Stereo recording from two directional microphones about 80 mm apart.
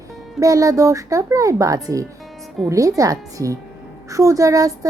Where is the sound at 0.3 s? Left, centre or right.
Right.